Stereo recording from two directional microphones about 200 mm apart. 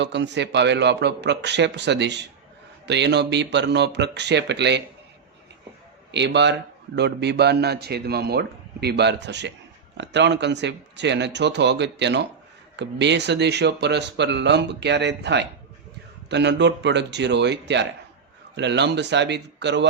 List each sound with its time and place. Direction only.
0.0 s a man's voice: 60° right (ahead or behind)
6.1 s a man's voice: 60° right (ahead or behind)